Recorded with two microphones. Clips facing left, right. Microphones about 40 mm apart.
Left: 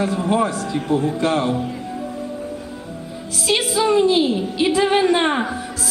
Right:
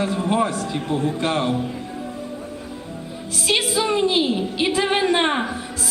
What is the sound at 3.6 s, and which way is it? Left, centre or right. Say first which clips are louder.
Music: left 3 dB; left.